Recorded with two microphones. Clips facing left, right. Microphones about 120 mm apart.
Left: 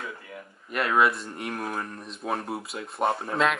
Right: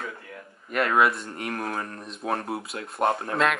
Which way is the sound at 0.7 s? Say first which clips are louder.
Right 1 dB; centre (ahead or behind).